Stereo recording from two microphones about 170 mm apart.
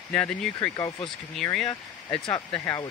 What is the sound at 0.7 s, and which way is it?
Speech, 20° left (ahead or behind).